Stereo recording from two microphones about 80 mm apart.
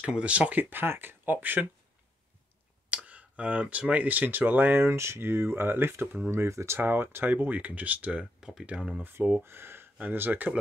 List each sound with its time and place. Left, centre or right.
0.0 s speech: centre
2.9 s speech: centre
9.0 s speech: right